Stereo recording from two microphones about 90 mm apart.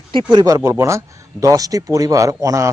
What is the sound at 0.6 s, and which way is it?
Speech, 30° right (ahead or behind).